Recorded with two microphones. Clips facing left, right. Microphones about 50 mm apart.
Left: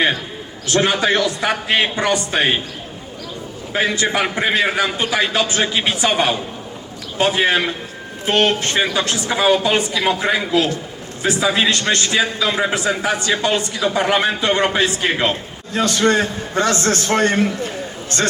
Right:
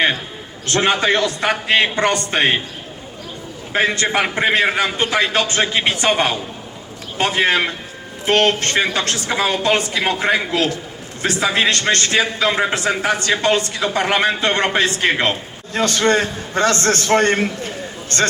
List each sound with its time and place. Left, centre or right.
0.7 s a man's voice: right
3.8 s a man's voice: right
8.3 s a man's voice: right